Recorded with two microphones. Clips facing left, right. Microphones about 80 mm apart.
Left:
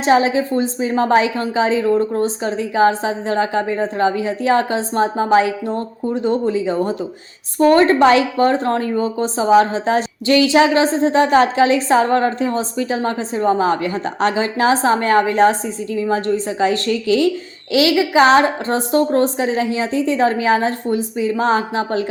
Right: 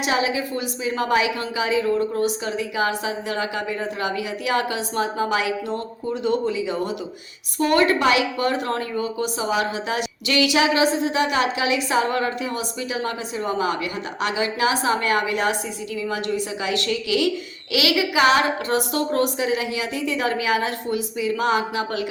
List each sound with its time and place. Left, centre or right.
0.0 s a woman's voice: left